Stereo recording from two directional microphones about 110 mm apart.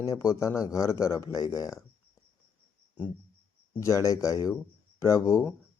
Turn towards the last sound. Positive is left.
turn(degrees=30)  # may be behind; listen again after turning